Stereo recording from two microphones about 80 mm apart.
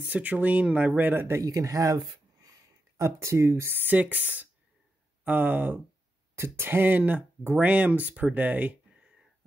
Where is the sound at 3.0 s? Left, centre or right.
Right.